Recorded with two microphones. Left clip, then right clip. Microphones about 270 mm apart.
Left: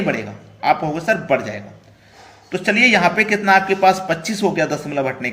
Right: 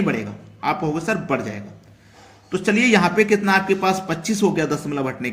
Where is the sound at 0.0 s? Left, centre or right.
Centre.